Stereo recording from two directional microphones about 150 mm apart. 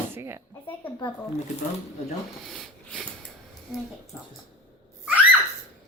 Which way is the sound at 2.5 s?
5° left (ahead or behind).